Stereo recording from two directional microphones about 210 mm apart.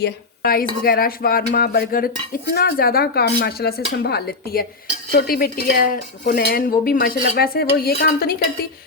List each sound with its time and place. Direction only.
0.0 s a woman's voice: 45° left (ahead or behind)
0.9 s chink: 45° left (ahead or behind)